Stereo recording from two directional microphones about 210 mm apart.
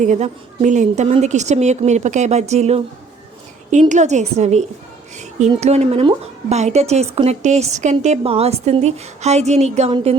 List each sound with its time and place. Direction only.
0.0 s a woman's voice: 35° right (ahead or behind)